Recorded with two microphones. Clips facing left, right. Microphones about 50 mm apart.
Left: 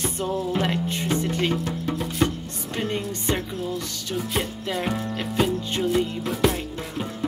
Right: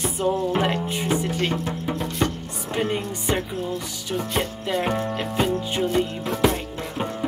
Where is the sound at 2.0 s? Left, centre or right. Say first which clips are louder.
Left 2 dB; centre.